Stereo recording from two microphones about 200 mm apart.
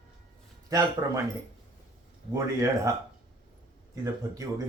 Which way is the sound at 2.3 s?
15° right (ahead or behind).